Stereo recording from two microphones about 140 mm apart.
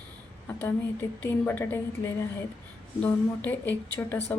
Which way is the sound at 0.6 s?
15° left (ahead or behind).